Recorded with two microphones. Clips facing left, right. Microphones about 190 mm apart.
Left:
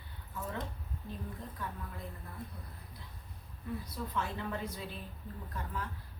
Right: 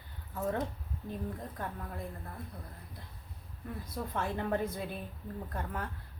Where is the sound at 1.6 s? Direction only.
50° right (ahead or behind).